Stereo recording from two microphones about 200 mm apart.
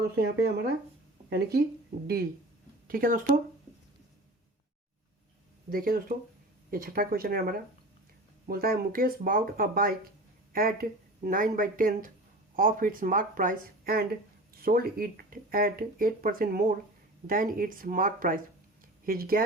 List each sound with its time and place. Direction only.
0.0 s speech: 55° right (ahead or behind)
2.8 s speech: 45° right (ahead or behind)
5.7 s speech: 45° right (ahead or behind)